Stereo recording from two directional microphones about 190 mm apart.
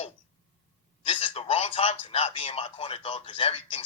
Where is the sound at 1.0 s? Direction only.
30° left (ahead or behind).